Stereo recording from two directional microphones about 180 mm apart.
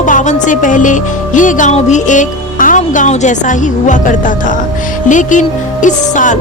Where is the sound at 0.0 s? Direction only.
45° left (ahead or behind).